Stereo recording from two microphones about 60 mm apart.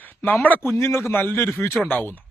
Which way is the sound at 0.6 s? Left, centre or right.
Left.